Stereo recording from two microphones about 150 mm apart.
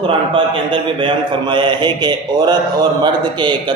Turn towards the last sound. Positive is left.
turn(degrees=-30)  # may be behind; listen again after turning